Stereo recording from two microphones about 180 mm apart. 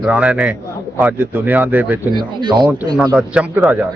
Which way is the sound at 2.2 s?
25° right (ahead or behind).